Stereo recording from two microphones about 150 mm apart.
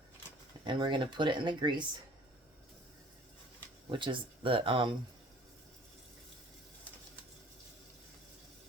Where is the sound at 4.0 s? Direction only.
35° right (ahead or behind).